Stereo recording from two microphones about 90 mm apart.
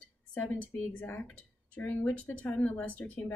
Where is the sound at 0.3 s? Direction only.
15° left (ahead or behind).